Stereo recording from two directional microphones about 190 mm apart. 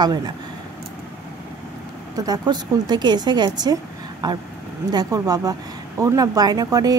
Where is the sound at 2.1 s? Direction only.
20° right (ahead or behind).